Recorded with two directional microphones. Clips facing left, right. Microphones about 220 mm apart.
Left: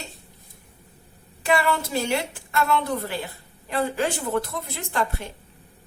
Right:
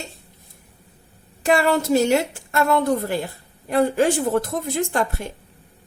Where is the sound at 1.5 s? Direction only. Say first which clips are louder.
Right 5 dB; 45° right (ahead or behind).